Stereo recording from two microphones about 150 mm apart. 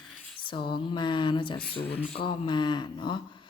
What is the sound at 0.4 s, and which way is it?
Speech, 30° left (ahead or behind).